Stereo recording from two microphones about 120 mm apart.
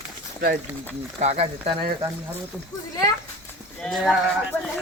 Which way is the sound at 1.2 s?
65° right (ahead or behind).